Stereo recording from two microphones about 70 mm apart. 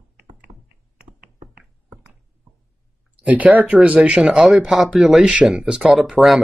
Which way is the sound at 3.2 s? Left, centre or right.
Right.